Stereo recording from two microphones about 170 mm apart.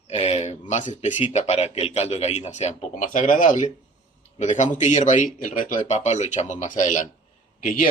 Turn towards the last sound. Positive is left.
turn(degrees=55)  # may be behind; listen again after turning